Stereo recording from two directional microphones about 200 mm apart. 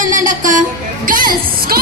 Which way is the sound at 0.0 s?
40° right (ahead or behind).